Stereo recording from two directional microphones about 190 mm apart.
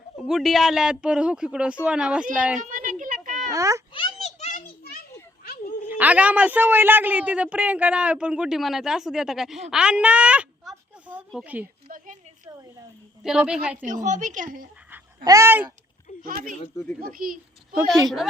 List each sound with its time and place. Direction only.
0.2 s speech: centre (ahead or behind)
2.6 s a sound: 45° right (ahead or behind)
3.5 s a man's voice: 15° right (ahead or behind)
3.9 s a sound: 30° left (ahead or behind)
5.9 s a man's voice: 10° right (ahead or behind)
13.2 s speech: 5° right (ahead or behind)
13.8 s a woman's voice: 40° right (ahead or behind)
15.2 s a man's voice: 15° right (ahead or behind)
16.2 s a woman's voice: 45° right (ahead or behind)